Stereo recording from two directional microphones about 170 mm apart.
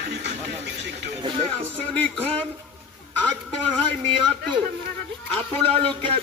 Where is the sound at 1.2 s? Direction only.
35° right (ahead or behind).